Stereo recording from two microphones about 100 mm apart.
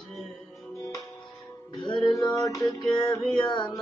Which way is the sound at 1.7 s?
55° left (ahead or behind).